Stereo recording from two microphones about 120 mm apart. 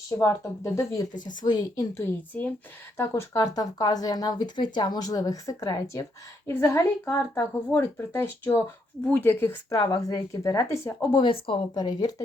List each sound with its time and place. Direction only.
0.2 s speech: 20° left (ahead or behind)
1.1 s speech: 40° left (ahead or behind)
2.0 s a woman's voice: 20° left (ahead or behind)
3.3 s speech: 30° left (ahead or behind)
11.2 s speech: 45° left (ahead or behind)